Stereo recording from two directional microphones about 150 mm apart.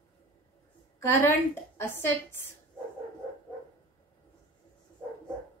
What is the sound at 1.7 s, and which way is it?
Speech, 15° left (ahead or behind).